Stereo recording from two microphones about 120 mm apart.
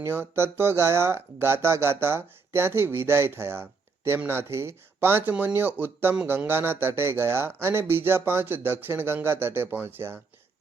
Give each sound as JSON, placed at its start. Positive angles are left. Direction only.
{"t": 0.0, "sound": "speech", "side_deg": -20}